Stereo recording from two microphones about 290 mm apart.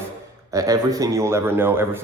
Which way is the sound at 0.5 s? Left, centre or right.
Centre.